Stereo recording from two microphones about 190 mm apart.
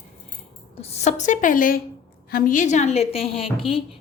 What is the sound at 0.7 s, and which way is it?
A woman's voice, 35° left (ahead or behind).